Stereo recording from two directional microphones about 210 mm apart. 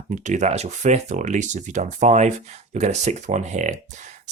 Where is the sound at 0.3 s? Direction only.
35° right (ahead or behind).